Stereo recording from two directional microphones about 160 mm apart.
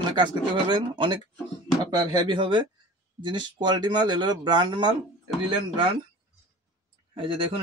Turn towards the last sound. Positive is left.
turn(degrees=-35)  # may be behind; listen again after turning